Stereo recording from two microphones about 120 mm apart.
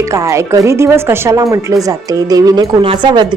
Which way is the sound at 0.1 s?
25° right (ahead or behind).